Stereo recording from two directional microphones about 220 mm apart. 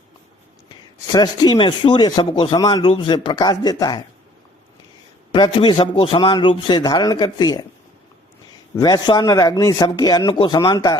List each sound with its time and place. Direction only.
0.7 s speech: 20° left (ahead or behind)
5.3 s speech: 20° left (ahead or behind)
8.7 s speech: 20° left (ahead or behind)